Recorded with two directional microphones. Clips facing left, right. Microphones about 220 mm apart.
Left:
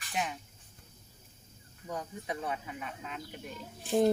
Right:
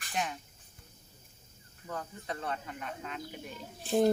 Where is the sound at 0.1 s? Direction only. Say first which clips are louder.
Even; centre (ahead or behind).